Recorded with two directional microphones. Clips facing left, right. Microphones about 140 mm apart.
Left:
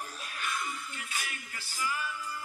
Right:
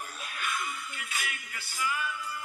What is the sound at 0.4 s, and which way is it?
Music, 40° left (ahead or behind).